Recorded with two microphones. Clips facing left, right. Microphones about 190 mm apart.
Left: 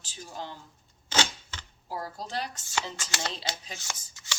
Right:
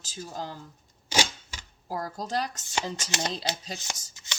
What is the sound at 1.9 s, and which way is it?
Speech, 45° right (ahead or behind).